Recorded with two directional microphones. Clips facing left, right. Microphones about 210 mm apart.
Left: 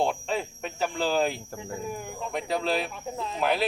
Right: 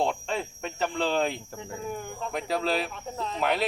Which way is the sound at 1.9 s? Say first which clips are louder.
Right 3 dB; centre (ahead or behind).